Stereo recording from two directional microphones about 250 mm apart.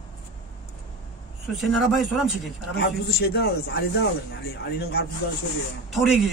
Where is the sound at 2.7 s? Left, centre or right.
Left.